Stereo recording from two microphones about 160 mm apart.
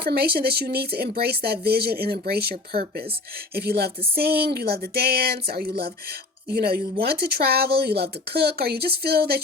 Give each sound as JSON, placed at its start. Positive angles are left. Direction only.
{"t": 0.0, "sound": "speech", "side_deg": -80}
{"t": 3.5, "sound": "speech", "side_deg": -85}